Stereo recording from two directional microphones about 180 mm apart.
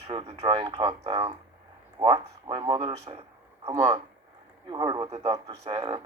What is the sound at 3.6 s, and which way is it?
Speech, 20° right (ahead or behind).